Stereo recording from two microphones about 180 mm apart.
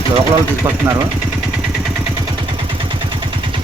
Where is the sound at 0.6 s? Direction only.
15° right (ahead or behind).